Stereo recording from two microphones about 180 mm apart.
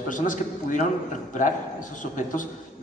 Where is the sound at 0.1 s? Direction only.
45° left (ahead or behind).